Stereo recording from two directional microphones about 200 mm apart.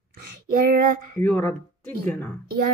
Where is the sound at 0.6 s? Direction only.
45° right (ahead or behind).